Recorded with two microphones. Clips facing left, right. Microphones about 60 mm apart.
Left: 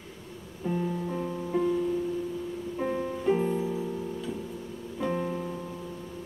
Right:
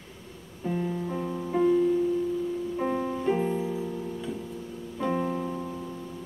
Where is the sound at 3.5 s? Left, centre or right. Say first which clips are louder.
Even; right.